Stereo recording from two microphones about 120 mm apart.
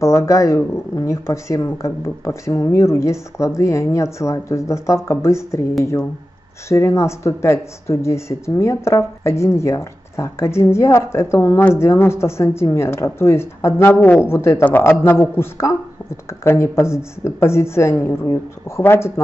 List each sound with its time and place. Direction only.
0.0 s speech: 25° left (ahead or behind)
6.7 s speech: 25° left (ahead or behind)